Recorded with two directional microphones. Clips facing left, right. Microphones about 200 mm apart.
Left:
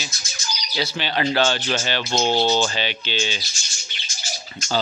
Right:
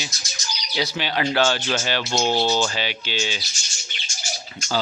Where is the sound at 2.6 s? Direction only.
5° right (ahead or behind).